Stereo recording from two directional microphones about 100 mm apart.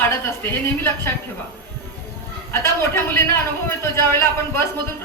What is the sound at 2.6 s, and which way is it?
Speech, 25° left (ahead or behind).